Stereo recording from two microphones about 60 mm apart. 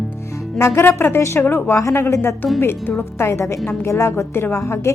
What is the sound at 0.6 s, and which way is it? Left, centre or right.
Speech, left.